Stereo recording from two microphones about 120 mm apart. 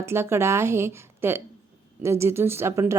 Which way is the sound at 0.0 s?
20° right (ahead or behind).